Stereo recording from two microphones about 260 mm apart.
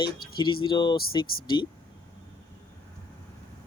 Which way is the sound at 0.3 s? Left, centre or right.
Centre.